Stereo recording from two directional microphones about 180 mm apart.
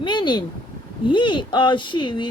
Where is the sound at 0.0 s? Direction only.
25° left (ahead or behind).